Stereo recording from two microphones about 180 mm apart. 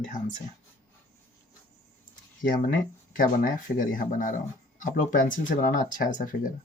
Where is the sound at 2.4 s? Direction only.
50° left (ahead or behind).